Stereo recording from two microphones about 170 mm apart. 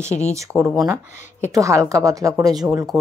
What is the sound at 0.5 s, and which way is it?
A woman's voice, 10° right (ahead or behind).